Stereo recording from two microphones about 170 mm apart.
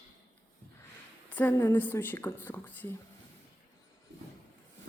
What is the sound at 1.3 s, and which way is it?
A woman's voice, 10° left (ahead or behind).